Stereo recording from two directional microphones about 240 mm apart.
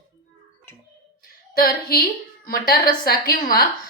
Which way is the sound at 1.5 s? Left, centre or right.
Left.